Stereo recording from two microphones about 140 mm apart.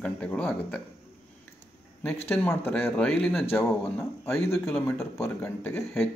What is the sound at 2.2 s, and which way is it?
Speech, 15° left (ahead or behind).